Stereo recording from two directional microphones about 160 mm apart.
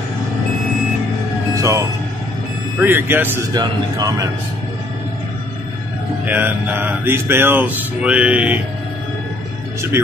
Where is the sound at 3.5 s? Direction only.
25° right (ahead or behind).